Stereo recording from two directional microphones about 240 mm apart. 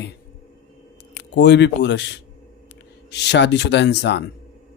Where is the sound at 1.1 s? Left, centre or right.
Left.